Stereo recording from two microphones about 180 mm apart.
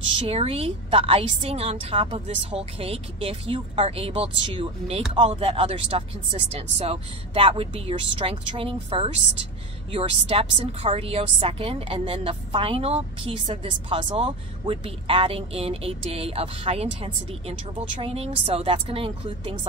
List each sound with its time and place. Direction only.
0.3 s a woman's voice: 35° right (ahead or behind)